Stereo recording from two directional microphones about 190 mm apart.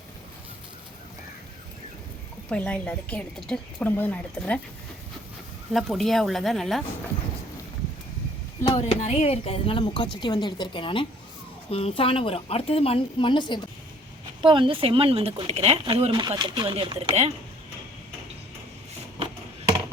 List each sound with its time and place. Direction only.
2.5 s a woman's voice: 5° left (ahead or behind)
5.7 s speech: centre (ahead or behind)
8.6 s a woman's voice: 30° left (ahead or behind)
14.4 s speech: 25° right (ahead or behind)